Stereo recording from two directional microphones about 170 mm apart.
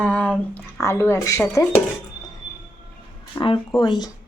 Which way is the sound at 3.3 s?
30° left (ahead or behind).